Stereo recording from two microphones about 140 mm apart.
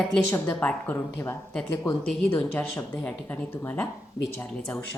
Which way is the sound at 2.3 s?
10° left (ahead or behind).